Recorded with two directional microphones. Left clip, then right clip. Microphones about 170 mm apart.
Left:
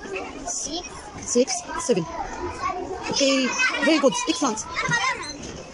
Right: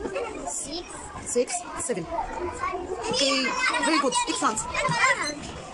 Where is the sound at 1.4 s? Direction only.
10° left (ahead or behind).